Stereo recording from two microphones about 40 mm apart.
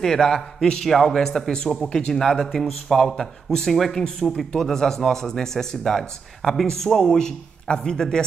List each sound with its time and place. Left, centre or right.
0.0 s speech: centre
1.9 s speech: left
2.1 s speech: centre